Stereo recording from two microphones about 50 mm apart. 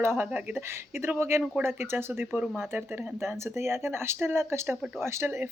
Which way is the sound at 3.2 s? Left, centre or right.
Right.